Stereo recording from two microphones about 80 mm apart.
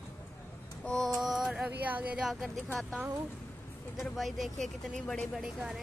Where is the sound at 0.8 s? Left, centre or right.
Centre.